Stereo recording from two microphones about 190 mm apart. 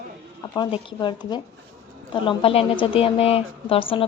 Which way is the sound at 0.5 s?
25° left (ahead or behind).